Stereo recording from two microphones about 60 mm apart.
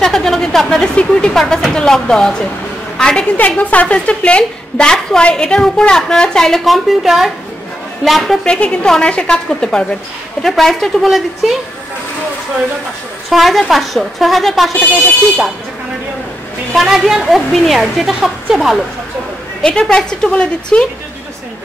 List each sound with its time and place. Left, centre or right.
0.0 s a sound: centre
0.9 s a woman's voice: centre
3.3 s a woman's voice: left; by 6.6 s centre
6.6 s a woman's voice: centre
8.5 s a woman's voice: centre
13.3 s a woman's voice: centre
16.7 s a woman's voice: centre
19.6 s a woman's voice: centre